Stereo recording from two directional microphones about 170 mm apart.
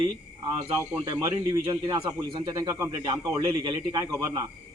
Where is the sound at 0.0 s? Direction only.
20° right (ahead or behind).